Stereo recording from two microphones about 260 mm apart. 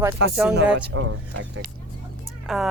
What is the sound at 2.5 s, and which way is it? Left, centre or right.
Speech, centre.